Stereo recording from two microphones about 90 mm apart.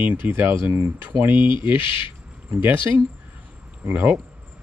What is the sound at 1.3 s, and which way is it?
Speech, 65° left (ahead or behind).